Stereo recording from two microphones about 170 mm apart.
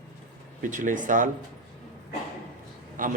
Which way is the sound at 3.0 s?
55° right (ahead or behind).